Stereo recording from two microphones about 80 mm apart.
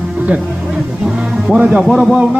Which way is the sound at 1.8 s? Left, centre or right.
Centre.